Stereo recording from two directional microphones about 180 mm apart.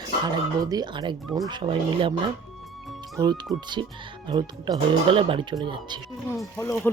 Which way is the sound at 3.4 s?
25° right (ahead or behind).